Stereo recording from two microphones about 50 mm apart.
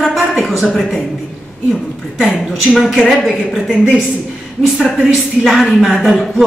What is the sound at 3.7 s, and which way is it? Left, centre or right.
A woman's voice, centre.